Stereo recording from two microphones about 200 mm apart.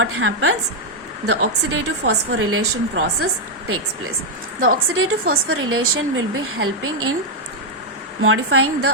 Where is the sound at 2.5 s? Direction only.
90° right.